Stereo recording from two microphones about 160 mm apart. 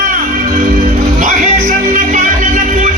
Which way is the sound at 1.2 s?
55° right (ahead or behind).